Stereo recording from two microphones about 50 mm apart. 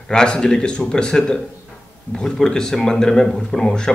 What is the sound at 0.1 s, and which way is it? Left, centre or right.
Speech, centre.